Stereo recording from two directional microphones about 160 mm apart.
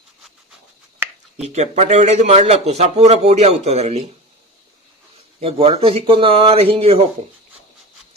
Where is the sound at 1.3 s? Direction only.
40° right (ahead or behind).